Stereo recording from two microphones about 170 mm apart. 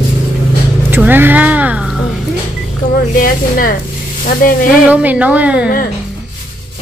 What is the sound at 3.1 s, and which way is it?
Speech, 55° left (ahead or behind).